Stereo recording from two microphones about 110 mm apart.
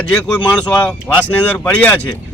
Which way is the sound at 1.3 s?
15° left (ahead or behind).